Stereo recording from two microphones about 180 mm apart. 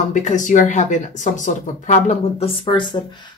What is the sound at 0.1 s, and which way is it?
Speech, 45° left (ahead or behind).